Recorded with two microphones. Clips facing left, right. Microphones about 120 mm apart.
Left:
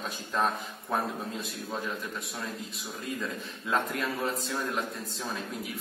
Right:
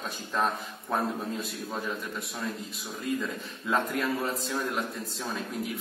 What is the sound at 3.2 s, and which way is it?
A man's voice, centre (ahead or behind).